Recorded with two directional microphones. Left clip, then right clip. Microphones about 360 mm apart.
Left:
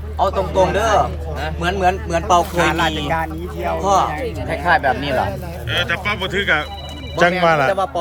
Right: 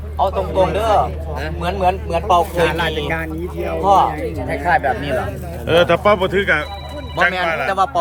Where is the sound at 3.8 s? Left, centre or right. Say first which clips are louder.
Right 3 dB; left.